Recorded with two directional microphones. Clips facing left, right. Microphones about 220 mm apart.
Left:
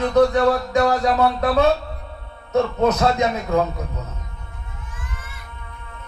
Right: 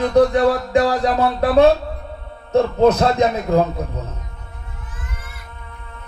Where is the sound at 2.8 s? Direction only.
30° right (ahead or behind).